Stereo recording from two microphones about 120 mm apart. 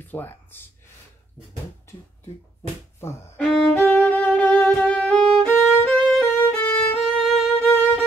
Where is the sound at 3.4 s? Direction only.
5° left (ahead or behind).